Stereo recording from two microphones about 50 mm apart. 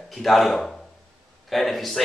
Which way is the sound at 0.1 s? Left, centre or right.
Centre.